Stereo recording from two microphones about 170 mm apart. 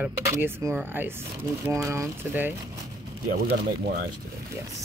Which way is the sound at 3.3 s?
65° right (ahead or behind).